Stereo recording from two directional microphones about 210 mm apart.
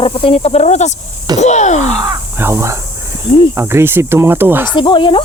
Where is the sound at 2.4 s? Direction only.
10° right (ahead or behind).